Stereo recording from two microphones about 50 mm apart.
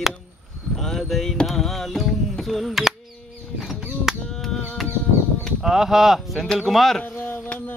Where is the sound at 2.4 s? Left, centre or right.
Centre.